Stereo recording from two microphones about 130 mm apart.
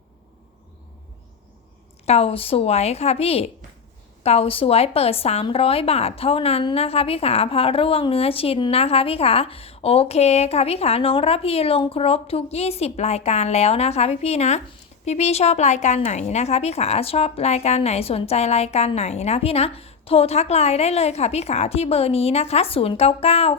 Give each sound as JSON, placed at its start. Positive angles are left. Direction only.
{"t": 2.0, "sound": "speech", "side_deg": 50}